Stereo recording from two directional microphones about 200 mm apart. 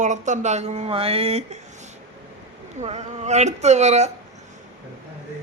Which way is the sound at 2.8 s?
30° right (ahead or behind).